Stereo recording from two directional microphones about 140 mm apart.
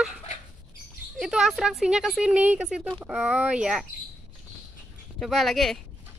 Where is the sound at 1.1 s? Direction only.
5° right (ahead or behind).